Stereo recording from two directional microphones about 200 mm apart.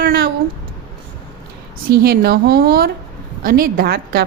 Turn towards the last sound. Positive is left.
turn(degrees=-50)  # may be behind; listen again after turning